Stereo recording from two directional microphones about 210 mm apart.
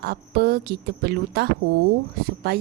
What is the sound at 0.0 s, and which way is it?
A woman's voice, 50° right (ahead or behind).